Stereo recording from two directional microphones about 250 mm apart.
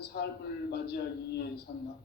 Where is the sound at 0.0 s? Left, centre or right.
Left.